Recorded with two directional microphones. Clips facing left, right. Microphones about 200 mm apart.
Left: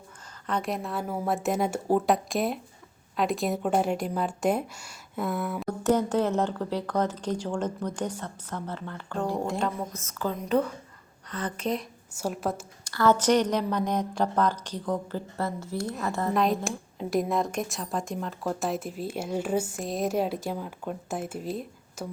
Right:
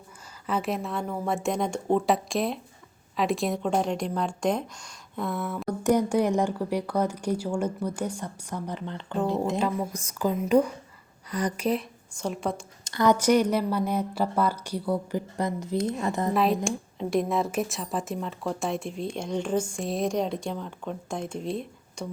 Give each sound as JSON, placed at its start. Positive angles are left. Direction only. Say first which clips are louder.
{"t": 0.4, "sound": "a woman's voice", "louder": "right 2 dB", "side_deg": -5}
{"t": 5.8, "sound": "speech", "louder": "right 1 dB", "side_deg": -10}
{"t": 9.6, "sound": "speech", "louder": "right 3 dB", "side_deg": -5}
{"t": 12.1, "sound": "a woman's voice", "louder": "even", "side_deg": 5}
{"t": 12.8, "sound": "speech", "louder": "right 1 dB", "side_deg": -20}
{"t": 16.3, "sound": "a woman's voice", "louder": "right 1 dB", "side_deg": 0}